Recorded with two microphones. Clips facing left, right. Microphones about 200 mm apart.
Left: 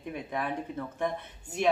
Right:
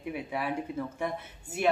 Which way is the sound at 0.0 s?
10° right (ahead or behind).